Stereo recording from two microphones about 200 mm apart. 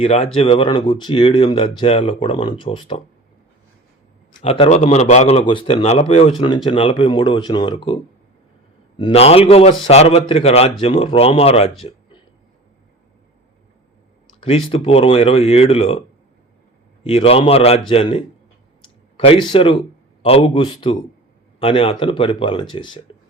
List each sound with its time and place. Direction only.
0.0 s a man's voice: 30° left (ahead or behind)
4.4 s a man's voice: 25° left (ahead or behind)
9.0 s speech: 25° left (ahead or behind)
14.4 s speech: 30° left (ahead or behind)